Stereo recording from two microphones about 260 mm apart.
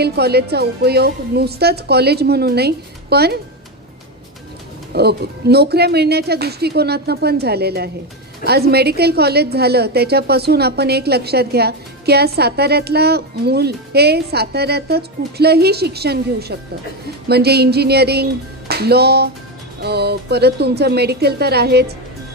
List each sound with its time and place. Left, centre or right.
0.0 s a woman's voice: right
4.9 s a woman's voice: right